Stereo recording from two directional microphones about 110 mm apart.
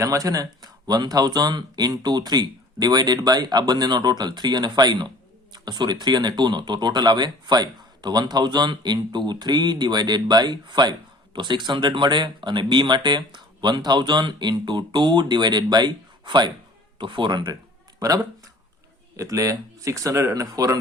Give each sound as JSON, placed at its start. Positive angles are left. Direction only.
{"t": 0.0, "sound": "speech", "side_deg": -30}